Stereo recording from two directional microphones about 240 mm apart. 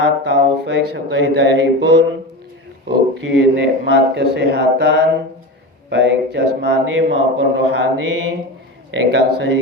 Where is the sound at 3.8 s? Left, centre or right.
Right.